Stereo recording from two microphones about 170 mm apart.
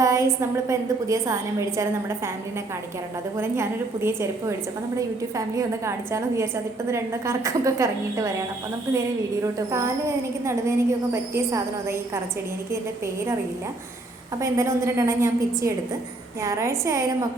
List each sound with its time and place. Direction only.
0.0 s a sound: 20° right (ahead or behind)
0.7 s a woman's voice: 20° right (ahead or behind)
3.3 s a woman's voice: 15° right (ahead or behind)
14.4 s a woman's voice: 15° right (ahead or behind)